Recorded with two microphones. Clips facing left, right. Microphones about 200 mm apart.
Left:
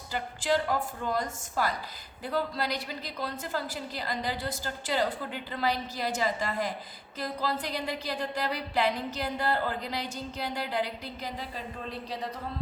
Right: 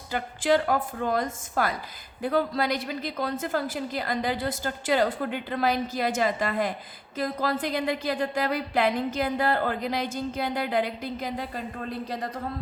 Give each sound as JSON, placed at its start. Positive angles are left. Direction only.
{"t": 0.1, "sound": "a woman's voice", "side_deg": -55}